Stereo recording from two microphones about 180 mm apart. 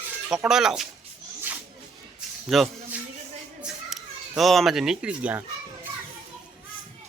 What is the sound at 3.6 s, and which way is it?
Children playing, 5° right (ahead or behind).